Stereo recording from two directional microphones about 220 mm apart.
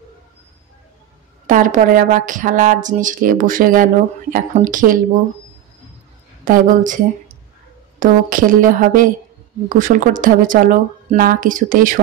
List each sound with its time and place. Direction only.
1.5 s speech: 35° right (ahead or behind)
6.4 s speech: 40° right (ahead or behind)
8.0 s speech: 40° right (ahead or behind)